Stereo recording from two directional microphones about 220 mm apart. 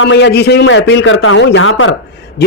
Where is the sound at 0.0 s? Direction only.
50° left (ahead or behind).